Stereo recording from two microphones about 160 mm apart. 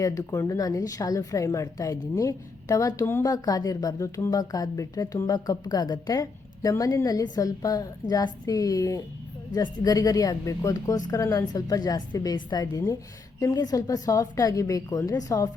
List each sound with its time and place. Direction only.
0.0 s a woman's voice: 20° left (ahead or behind)